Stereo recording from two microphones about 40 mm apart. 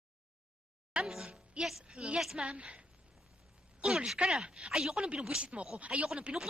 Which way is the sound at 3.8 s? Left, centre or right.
Centre.